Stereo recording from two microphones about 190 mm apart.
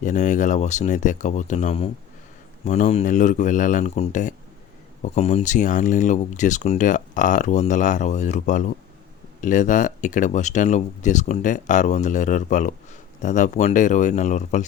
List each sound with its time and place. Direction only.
0.0 s speech: 40° left (ahead or behind)